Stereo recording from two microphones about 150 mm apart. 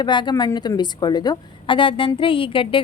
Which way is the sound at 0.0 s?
30° left (ahead or behind).